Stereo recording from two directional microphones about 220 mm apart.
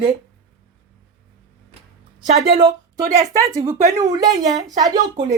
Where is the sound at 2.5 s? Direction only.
20° right (ahead or behind).